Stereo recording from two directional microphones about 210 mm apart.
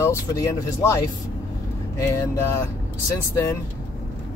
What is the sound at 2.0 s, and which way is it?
Speech, 15° left (ahead or behind).